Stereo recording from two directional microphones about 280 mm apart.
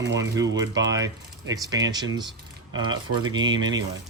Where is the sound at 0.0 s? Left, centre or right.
Right.